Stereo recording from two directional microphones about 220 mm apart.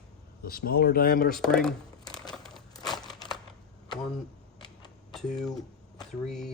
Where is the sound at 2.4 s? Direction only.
Centre (ahead or behind).